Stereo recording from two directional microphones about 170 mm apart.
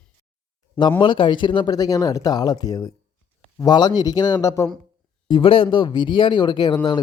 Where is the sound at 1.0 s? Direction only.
30° left (ahead or behind).